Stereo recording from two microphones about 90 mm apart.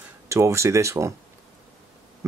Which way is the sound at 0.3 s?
35° right (ahead or behind).